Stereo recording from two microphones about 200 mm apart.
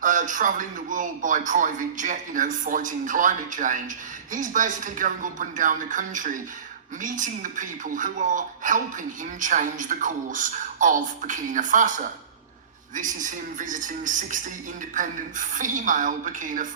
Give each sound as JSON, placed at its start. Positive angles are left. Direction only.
{"t": 0.0, "sound": "speech", "side_deg": -40}